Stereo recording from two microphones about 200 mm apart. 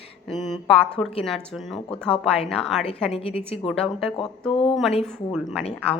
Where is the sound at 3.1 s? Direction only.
30° left (ahead or behind).